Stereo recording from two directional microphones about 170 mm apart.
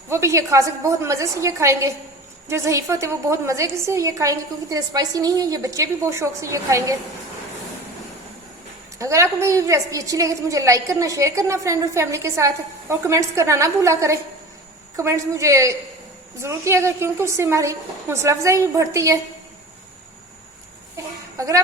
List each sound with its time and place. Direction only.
0.1 s a woman's voice: 15° right (ahead or behind)
9.0 s a woman's voice: 15° right (ahead or behind)
20.9 s a sound: 20° right (ahead or behind)